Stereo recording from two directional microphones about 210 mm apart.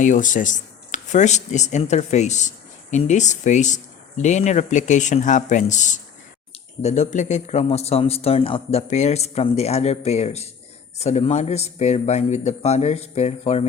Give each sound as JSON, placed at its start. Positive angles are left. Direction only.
{"t": 0.0, "sound": "speech", "side_deg": 35}